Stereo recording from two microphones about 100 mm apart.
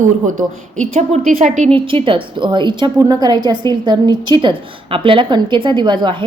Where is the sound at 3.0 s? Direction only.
40° right (ahead or behind).